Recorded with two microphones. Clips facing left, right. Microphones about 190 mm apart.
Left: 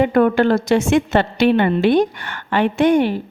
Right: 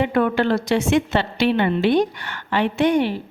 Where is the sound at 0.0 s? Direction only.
45° left (ahead or behind).